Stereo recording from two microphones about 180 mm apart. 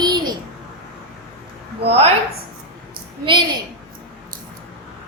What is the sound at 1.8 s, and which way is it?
A woman's voice, 35° right (ahead or behind).